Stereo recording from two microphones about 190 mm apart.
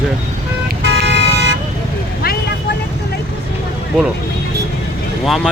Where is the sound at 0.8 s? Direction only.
65° right (ahead or behind).